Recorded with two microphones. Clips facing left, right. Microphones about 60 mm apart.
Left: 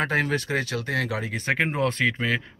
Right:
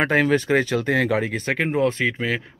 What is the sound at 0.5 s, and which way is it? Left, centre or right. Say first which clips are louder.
Speech: right 7 dB; right.